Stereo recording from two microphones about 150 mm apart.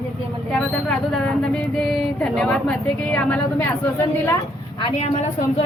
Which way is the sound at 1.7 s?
5° left (ahead or behind).